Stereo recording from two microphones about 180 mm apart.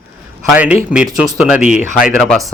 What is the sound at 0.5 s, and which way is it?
A man's voice, 10° right (ahead or behind).